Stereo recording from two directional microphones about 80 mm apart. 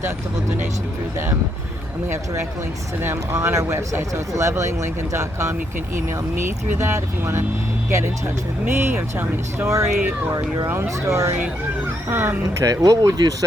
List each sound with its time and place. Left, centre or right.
3.0 s speech: right
12.5 s speech: right